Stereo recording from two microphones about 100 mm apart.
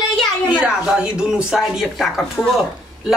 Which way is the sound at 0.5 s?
10° right (ahead or behind).